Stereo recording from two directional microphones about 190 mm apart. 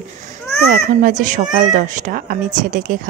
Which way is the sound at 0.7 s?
45° right (ahead or behind).